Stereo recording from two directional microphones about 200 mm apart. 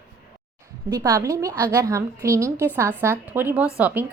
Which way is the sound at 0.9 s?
15° right (ahead or behind).